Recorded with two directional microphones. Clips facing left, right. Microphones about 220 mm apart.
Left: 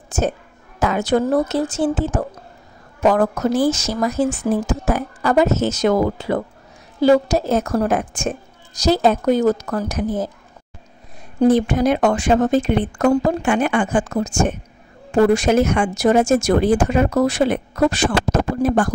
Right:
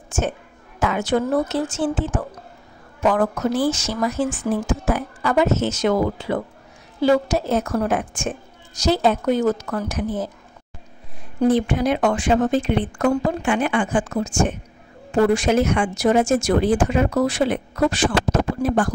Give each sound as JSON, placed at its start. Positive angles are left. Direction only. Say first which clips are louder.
{"t": 0.7, "sound": "speech", "louder": "left 3 dB", "side_deg": 40}
{"t": 11.3, "sound": "speech", "louder": "left 3 dB", "side_deg": 40}